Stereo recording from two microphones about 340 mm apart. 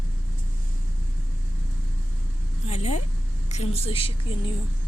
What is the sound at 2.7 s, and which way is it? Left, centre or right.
A woman's voice, centre.